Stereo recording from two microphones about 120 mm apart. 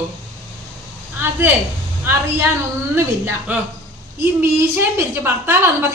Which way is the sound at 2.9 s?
20° right (ahead or behind).